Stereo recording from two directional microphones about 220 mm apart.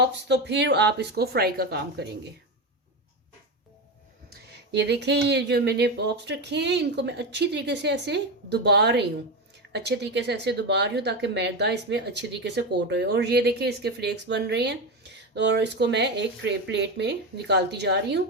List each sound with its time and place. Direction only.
0.0 s a woman's voice: 50° right (ahead or behind)
4.3 s a woman's voice: 50° right (ahead or behind)